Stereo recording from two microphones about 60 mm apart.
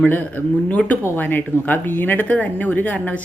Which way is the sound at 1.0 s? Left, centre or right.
Left.